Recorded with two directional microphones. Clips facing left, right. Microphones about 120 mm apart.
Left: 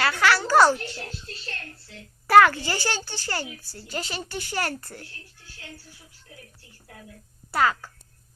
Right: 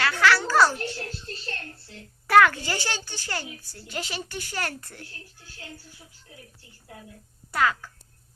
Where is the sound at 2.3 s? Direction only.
5° left (ahead or behind).